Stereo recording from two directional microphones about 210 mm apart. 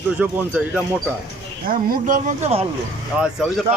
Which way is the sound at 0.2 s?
5° right (ahead or behind).